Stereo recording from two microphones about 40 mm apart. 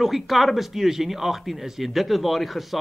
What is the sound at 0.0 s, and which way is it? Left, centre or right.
Speech, centre.